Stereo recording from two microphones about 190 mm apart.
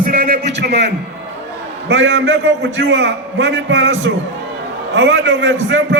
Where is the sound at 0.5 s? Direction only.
65° right (ahead or behind).